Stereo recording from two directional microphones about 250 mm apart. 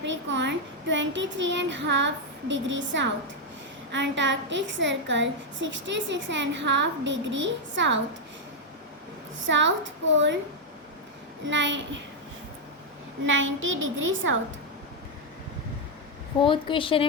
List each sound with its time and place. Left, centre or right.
0.0 s a woman's voice: right
9.5 s a woman's voice: right
11.4 s a woman's voice: right
13.2 s a woman's voice: right
16.4 s a woman's voice: centre